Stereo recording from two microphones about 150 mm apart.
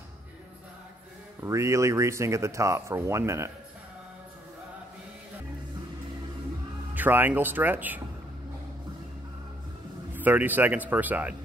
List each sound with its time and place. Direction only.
1.4 s speech: 20° right (ahead or behind)
7.0 s speech: 15° right (ahead or behind)
10.1 s speech: 10° right (ahead or behind)